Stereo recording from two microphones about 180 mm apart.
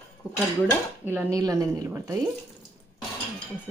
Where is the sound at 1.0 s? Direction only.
10° right (ahead or behind).